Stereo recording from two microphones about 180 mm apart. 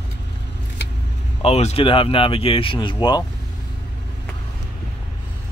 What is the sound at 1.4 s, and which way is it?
Speech, 35° left (ahead or behind).